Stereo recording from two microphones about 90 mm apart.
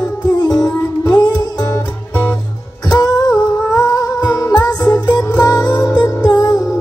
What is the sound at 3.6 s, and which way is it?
Music, 40° left (ahead or behind).